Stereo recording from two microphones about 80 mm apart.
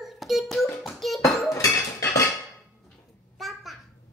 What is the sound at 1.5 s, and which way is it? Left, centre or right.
Dishes, left.